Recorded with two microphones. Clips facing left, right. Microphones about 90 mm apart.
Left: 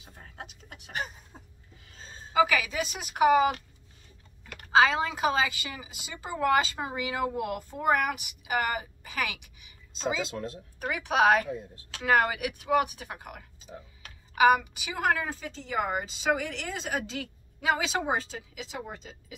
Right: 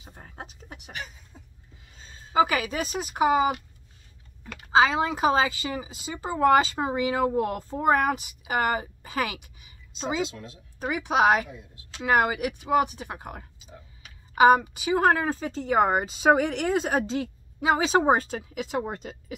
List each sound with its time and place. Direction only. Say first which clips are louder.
0.0 s a sound: right 3 dB; 30° right (ahead or behind)
0.9 s a sound: left 5 dB; 40° left (ahead or behind)
2.3 s speech: right 2 dB; 35° right (ahead or behind)
4.7 s speech: right 2 dB; 20° right (ahead or behind)
10.2 s speech: right 1 dB; 40° left (ahead or behind)
10.8 s a woman's voice: right 2 dB; 20° right (ahead or behind); by 19.3 s 55° right (ahead or behind)